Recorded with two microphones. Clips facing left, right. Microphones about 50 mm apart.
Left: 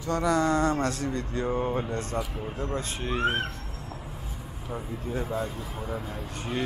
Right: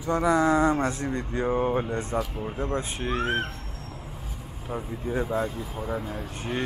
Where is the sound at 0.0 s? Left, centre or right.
Centre.